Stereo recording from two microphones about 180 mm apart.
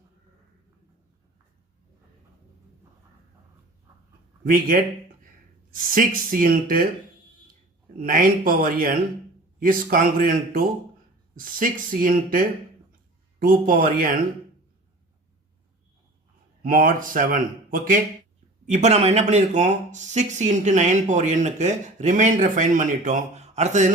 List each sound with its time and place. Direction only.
4.4 s speech: 50° right (ahead or behind)
7.9 s speech: 50° right (ahead or behind)
16.6 s speech: 50° right (ahead or behind)